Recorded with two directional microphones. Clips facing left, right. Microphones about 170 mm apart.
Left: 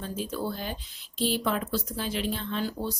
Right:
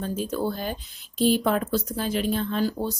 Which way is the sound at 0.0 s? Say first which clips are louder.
Right 5 dB; 45° right (ahead or behind).